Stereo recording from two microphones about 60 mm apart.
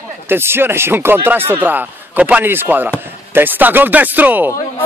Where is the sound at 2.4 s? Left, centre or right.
Right.